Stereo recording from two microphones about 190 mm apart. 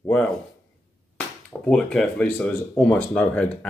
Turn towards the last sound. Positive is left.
turn(degrees=5)  # may be behind; listen again after turning